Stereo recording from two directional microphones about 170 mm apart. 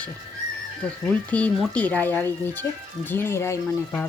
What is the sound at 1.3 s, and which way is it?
Speech, 10° left (ahead or behind).